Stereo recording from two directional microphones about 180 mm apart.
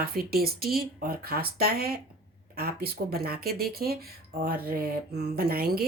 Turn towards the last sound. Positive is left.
turn(degrees=-55)  # may be behind; listen again after turning